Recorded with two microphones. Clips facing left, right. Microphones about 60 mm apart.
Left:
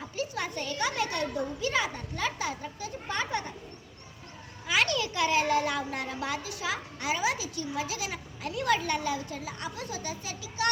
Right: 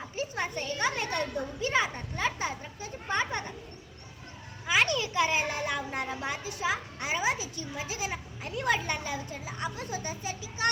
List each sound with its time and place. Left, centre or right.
0.2 s a child's voice: right
4.6 s a woman's voice: right